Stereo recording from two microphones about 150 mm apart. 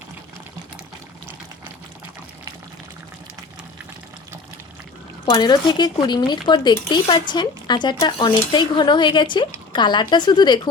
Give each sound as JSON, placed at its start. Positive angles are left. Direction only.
{"t": 5.2, "sound": "speech", "side_deg": 30}